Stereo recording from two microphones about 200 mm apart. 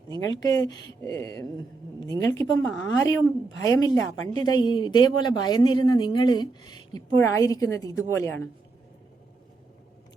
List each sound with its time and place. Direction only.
0.2 s a woman's voice: 20° left (ahead or behind)